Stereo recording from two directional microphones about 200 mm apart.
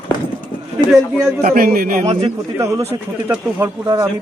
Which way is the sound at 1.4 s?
45° right (ahead or behind).